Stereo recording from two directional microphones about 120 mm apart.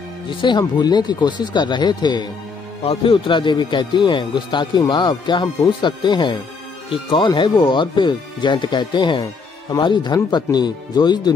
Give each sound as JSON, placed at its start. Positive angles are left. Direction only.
{"t": 0.3, "sound": "speech", "side_deg": 40}
{"t": 2.8, "sound": "speech", "side_deg": 50}